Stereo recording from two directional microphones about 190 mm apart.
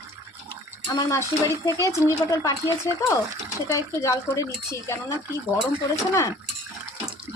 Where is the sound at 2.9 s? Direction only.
15° left (ahead or behind).